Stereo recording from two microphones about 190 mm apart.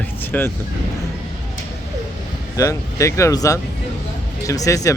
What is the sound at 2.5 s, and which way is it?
Speech, 15° left (ahead or behind).